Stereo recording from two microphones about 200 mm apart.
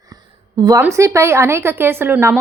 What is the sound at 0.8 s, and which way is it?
Speech, 15° right (ahead or behind).